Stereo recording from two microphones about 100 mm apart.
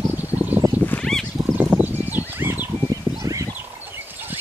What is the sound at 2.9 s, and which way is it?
Bird, 35° right (ahead or behind).